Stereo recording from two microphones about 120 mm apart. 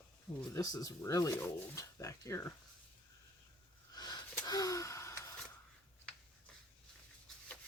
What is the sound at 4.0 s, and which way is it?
Gasp, 35° left (ahead or behind).